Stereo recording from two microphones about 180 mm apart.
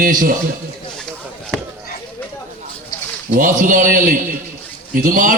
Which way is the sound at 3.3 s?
45° right (ahead or behind).